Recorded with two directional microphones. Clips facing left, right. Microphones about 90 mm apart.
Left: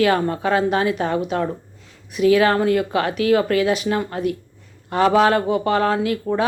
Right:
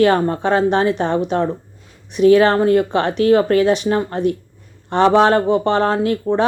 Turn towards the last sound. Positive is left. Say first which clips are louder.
# right 2 dB
turn(degrees=-30)  # may be behind; listen again after turning